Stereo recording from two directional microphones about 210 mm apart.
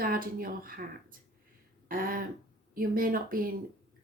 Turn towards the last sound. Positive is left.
turn(degrees=-45)  # may be behind; listen again after turning